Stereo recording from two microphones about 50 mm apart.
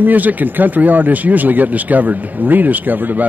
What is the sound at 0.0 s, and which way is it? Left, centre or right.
Speech, right.